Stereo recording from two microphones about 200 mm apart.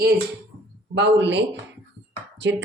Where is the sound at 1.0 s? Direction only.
60° right (ahead or behind).